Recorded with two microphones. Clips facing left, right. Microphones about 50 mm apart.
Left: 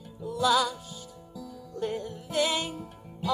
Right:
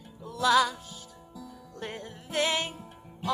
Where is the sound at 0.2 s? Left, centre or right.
Right.